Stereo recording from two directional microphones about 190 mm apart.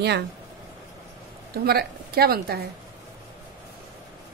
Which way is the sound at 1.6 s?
55° right (ahead or behind).